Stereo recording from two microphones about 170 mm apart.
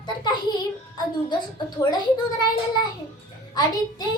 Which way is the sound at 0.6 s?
25° left (ahead or behind).